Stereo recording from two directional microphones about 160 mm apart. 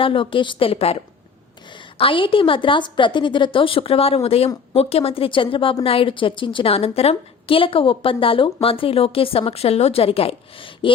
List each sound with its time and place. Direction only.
0.0 s a woman's voice: 35° left (ahead or behind)